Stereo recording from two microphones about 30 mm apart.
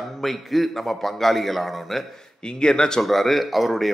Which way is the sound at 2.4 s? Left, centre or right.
Left.